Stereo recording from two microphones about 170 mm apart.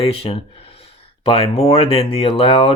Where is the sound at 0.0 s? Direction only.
35° left (ahead or behind).